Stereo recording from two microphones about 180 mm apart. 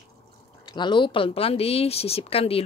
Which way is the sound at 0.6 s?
25° left (ahead or behind).